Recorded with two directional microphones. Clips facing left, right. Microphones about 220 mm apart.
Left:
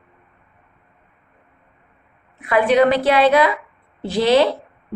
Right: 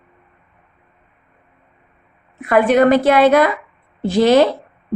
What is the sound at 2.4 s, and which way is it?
A woman's voice, 50° right (ahead or behind).